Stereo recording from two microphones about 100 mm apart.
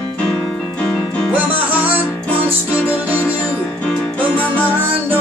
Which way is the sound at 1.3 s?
15° right (ahead or behind).